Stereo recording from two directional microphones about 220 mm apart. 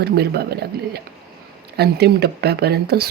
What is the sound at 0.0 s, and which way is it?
Speech, 45° right (ahead or behind).